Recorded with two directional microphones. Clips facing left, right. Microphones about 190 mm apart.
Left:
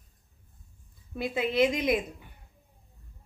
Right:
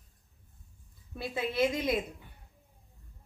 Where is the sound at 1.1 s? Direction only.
20° left (ahead or behind).